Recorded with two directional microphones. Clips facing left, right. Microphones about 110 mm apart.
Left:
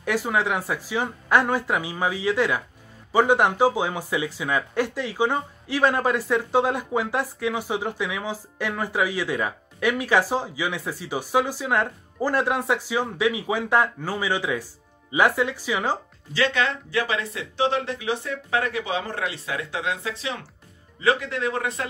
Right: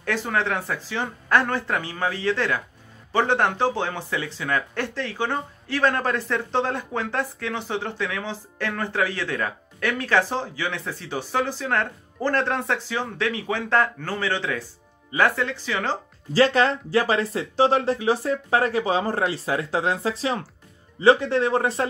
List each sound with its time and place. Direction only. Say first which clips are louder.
0.0 s speech: left 1 dB; 10° left (ahead or behind)
16.3 s speech: right 5 dB; 40° right (ahead or behind)